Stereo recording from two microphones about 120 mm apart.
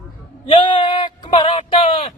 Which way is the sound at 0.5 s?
40° left (ahead or behind).